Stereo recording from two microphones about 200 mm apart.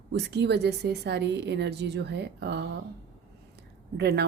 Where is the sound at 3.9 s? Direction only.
55° right (ahead or behind).